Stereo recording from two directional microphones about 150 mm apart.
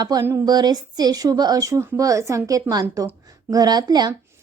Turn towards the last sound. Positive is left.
turn(degrees=-25)  # may be behind; listen again after turning